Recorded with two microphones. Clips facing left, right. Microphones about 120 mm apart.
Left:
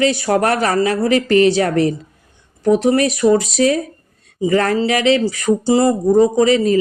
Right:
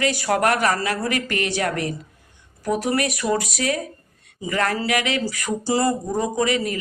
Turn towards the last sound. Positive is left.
turn(degrees=30)  # may be behind; listen again after turning